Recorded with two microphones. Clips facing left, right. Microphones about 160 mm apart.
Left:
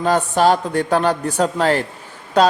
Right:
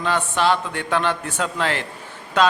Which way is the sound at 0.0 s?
40° left (ahead or behind).